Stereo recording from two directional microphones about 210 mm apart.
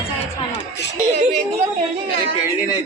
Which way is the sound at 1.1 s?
30° right (ahead or behind).